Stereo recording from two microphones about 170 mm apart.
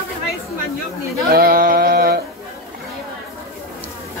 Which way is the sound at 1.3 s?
60° right (ahead or behind).